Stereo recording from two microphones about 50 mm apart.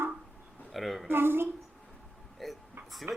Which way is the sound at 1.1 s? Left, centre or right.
Right.